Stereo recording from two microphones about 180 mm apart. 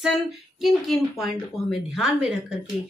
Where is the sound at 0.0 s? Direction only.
Centre (ahead or behind).